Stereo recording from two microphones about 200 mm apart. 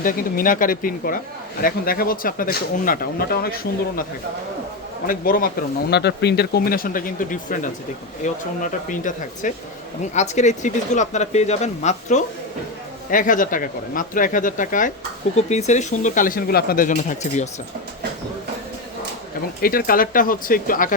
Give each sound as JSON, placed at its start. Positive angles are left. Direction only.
{"t": 0.0, "sound": "speech", "side_deg": 45}
{"t": 5.0, "sound": "speech", "side_deg": 45}
{"t": 5.9, "sound": "speech", "side_deg": 55}
{"t": 19.6, "sound": "speech", "side_deg": 45}